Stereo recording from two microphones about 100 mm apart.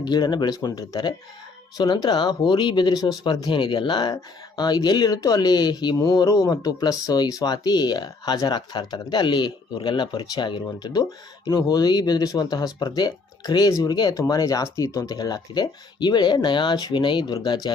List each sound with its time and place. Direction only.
0.0 s speech: 45° left (ahead or behind)
11.4 s speech: 40° left (ahead or behind)